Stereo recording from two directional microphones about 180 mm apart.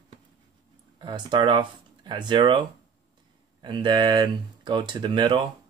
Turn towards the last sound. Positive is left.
turn(degrees=-25)  # may be behind; listen again after turning